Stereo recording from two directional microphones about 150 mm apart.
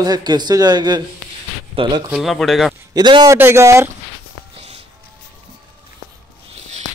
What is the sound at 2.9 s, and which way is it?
Speech, 30° right (ahead or behind).